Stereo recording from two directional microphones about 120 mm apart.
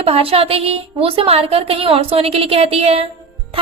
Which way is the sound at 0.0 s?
55° right (ahead or behind).